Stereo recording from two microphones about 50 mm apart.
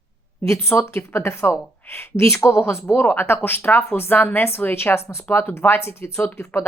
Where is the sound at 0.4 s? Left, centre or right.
Left.